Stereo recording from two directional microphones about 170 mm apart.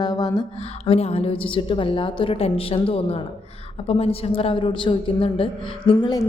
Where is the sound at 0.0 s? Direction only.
25° left (ahead or behind).